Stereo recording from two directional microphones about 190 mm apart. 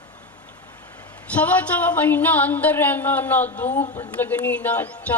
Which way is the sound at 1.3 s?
10° left (ahead or behind).